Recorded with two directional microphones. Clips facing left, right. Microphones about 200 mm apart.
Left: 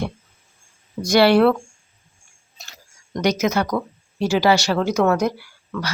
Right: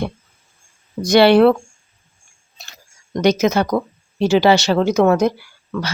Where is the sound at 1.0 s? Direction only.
20° right (ahead or behind).